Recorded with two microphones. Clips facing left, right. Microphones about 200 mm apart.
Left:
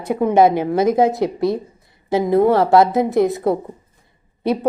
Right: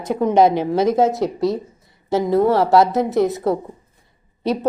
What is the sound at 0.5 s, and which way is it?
Speech, 55° left (ahead or behind).